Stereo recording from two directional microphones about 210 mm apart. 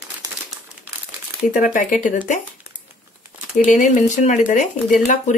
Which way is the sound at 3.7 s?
35° left (ahead or behind).